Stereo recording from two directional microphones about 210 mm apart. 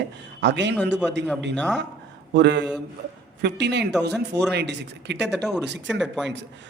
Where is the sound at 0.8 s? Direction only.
5° right (ahead or behind).